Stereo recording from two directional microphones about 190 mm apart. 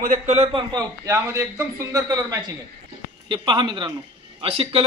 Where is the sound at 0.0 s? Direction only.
45° right (ahead or behind).